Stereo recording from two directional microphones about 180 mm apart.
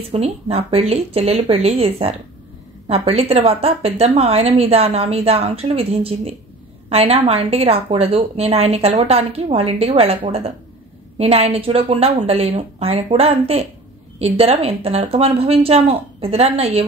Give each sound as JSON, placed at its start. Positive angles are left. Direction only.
{"t": 0.1, "sound": "a woman's voice", "side_deg": -35}